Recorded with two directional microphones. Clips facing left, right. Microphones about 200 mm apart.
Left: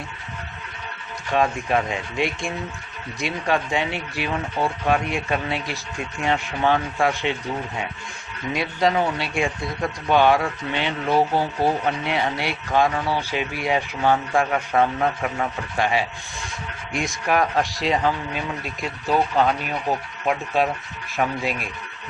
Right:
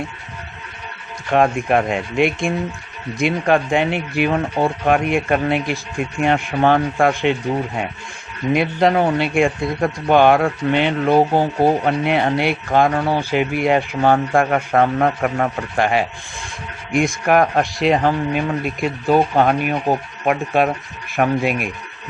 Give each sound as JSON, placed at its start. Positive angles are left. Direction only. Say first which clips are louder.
{"t": 1.3, "sound": "speech", "louder": "right 5 dB", "side_deg": -55}
{"t": 8.5, "sound": "speech", "louder": "right 5 dB", "side_deg": -55}